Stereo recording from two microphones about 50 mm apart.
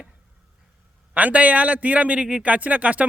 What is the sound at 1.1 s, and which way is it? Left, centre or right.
Speech, right.